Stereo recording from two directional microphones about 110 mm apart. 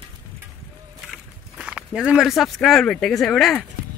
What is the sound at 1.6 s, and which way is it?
Speech, 10° right (ahead or behind).